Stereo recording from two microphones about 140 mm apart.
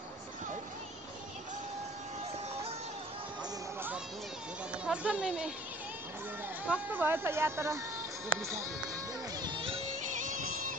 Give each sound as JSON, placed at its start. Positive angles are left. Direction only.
{"t": 4.8, "sound": "speech", "side_deg": -10}
{"t": 6.6, "sound": "speech", "side_deg": -10}
{"t": 9.4, "sound": "music", "side_deg": -40}
{"t": 10.2, "sound": "music", "side_deg": -70}